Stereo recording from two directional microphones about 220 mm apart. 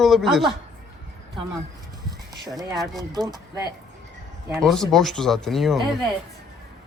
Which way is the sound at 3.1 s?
20° right (ahead or behind).